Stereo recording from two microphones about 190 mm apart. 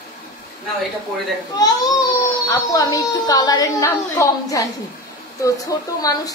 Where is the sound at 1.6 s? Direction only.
20° left (ahead or behind).